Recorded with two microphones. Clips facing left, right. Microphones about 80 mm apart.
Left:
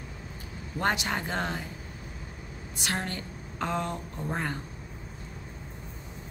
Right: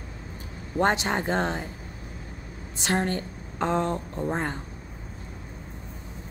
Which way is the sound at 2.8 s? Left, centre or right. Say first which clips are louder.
Right 7 dB; right.